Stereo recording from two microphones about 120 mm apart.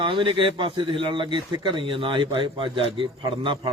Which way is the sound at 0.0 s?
45° right (ahead or behind).